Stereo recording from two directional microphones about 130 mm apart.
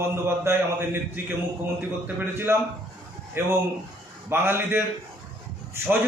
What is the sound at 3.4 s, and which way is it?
A man's voice, 20° right (ahead or behind).